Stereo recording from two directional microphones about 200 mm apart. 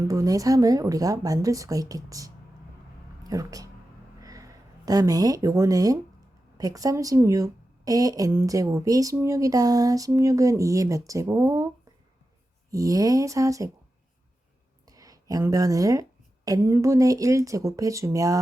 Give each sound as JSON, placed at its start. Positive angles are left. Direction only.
{"t": 0.1, "sound": "speech", "side_deg": -15}
{"t": 4.2, "sound": "a sound", "side_deg": -15}
{"t": 6.6, "sound": "speech", "side_deg": -15}
{"t": 12.7, "sound": "speech", "side_deg": -15}
{"t": 14.8, "sound": "speech", "side_deg": -15}